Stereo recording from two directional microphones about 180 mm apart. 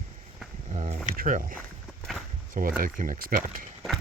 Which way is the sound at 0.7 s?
35° right (ahead or behind).